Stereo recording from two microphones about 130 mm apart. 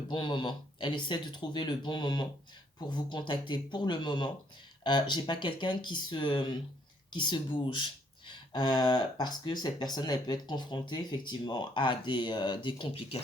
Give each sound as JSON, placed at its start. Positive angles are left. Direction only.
{"t": 0.1, "sound": "speech", "side_deg": 40}